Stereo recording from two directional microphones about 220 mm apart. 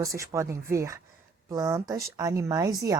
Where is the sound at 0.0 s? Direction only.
15° right (ahead or behind).